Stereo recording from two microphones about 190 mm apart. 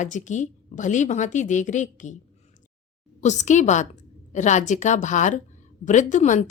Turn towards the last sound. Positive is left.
turn(degrees=40)  # may be behind; listen again after turning